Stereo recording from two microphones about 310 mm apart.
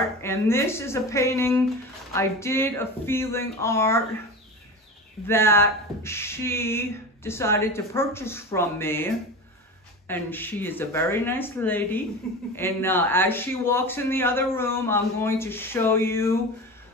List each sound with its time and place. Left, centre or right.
0.2 s speech: centre
5.2 s speech: centre